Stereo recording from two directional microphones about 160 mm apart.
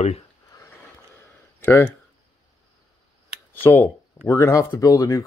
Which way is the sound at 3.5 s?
15° left (ahead or behind).